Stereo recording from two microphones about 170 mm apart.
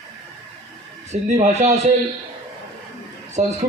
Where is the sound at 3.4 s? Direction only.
40° right (ahead or behind).